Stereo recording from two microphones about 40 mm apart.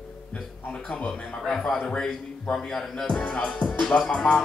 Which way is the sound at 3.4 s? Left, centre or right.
Left.